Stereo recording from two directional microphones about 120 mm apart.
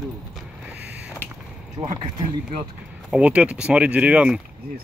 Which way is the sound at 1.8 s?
35° right (ahead or behind).